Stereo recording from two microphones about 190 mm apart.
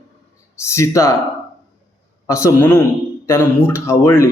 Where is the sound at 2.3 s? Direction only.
15° left (ahead or behind).